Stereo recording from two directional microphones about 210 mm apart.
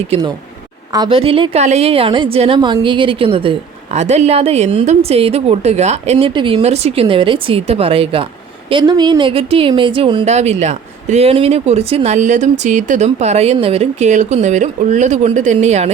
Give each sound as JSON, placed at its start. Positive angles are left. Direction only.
{"t": 0.1, "sound": "a woman's voice", "side_deg": -20}